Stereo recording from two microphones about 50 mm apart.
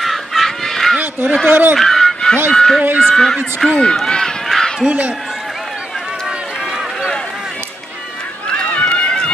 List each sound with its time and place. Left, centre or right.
0.0 s fowl: centre
1.2 s speech: centre
1.5 s speech: right
1.8 s honk: centre
2.5 s speech: centre
3.8 s run: centre
4.8 s speech: right
8.5 s run: left